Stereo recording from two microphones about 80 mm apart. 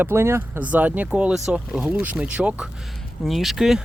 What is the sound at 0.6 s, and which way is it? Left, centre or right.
Speech, centre.